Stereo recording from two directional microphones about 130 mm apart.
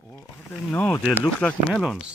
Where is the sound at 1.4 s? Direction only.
Centre (ahead or behind).